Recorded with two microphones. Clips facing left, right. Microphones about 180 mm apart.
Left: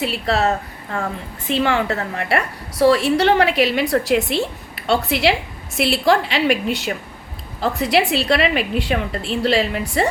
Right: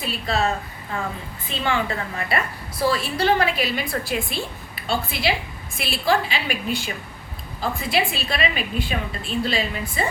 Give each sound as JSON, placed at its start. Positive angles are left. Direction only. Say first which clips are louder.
{"t": 0.0, "sound": "a woman's voice", "louder": "left 4 dB", "side_deg": 75}